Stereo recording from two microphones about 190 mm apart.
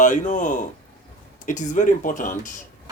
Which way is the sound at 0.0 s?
40° left (ahead or behind).